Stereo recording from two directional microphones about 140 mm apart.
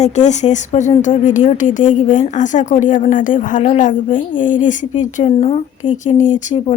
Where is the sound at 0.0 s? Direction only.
55° left (ahead or behind).